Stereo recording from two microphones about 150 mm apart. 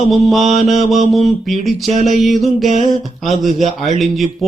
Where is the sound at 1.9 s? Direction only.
50° right (ahead or behind).